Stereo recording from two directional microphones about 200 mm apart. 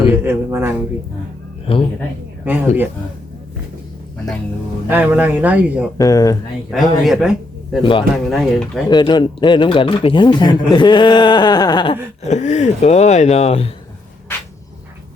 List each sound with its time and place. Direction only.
0.1 s a man's voice: 10° right (ahead or behind)
1.6 s speech: 25° left (ahead or behind)
4.9 s a man's voice: 10° right (ahead or behind)
6.0 s speech: 20° left (ahead or behind)
6.7 s speech: centre (ahead or behind)
7.8 s speech: 25° left (ahead or behind)
8.1 s speech: centre (ahead or behind)
8.9 s speech: 20° left (ahead or behind)
12.3 s speech: 35° left (ahead or behind)